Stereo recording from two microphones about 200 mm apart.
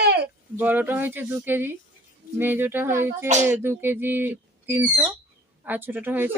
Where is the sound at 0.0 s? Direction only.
55° right (ahead or behind).